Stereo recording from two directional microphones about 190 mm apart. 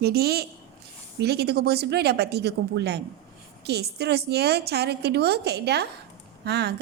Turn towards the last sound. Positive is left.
turn(degrees=-60)  # may be behind; listen again after turning